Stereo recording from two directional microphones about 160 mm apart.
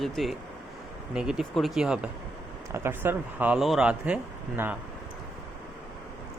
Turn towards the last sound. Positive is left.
turn(degrees=-10)  # may be behind; listen again after turning